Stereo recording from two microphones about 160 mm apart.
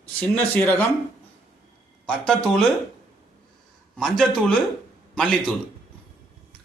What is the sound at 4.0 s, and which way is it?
A man's voice, centre (ahead or behind).